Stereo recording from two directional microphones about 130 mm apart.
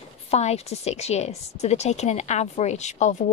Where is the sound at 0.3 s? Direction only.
55° left (ahead or behind).